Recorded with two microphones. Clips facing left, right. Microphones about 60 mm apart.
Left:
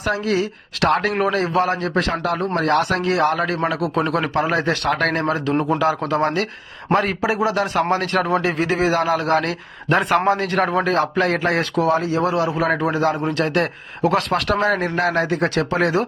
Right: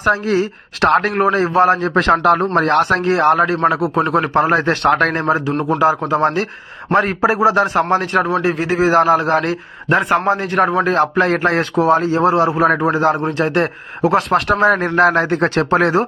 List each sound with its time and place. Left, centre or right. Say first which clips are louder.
0.0 s speech: right 5 dB; right
2.0 s speech: right 9 dB; right
2.6 s speech: right 4 dB; right; by 4.2 s centre
4.2 s speech: right 5 dB; right
5.2 s speech: right 3 dB; centre
8.9 s speech: right 9 dB; right
10.8 s speech: right 4 dB; right